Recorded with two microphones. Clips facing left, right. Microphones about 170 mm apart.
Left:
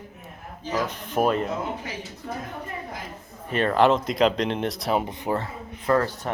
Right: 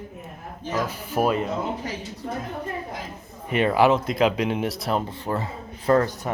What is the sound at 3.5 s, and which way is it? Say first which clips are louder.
Speech: right 1 dB; 10° right (ahead or behind).